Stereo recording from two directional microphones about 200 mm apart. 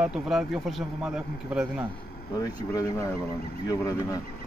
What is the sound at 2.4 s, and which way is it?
Speech, 20° left (ahead or behind).